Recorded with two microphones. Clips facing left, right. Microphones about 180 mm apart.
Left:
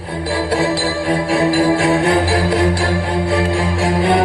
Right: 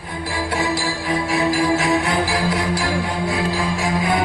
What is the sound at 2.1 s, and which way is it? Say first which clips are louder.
Music: left 5 dB; 60° left (ahead or behind).